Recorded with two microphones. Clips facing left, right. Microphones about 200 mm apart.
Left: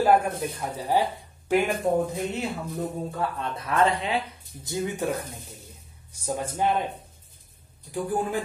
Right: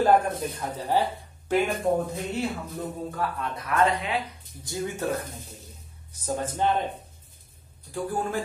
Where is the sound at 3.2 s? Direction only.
25° left (ahead or behind).